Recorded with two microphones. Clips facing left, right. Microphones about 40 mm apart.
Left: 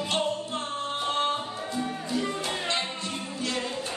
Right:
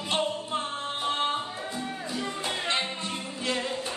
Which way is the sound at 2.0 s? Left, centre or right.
Centre.